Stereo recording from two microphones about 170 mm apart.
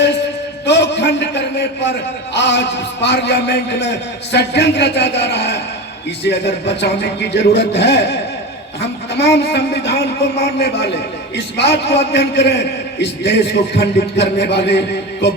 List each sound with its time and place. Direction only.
0.6 s a man's voice: 90° left